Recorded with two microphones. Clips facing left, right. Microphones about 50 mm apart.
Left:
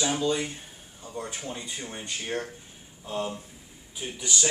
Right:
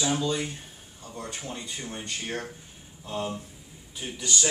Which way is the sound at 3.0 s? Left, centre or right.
Centre.